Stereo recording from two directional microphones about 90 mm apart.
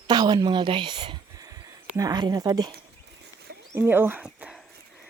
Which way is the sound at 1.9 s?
45° right (ahead or behind).